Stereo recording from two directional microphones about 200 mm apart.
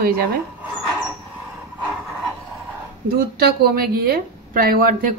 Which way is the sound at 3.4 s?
50° right (ahead or behind).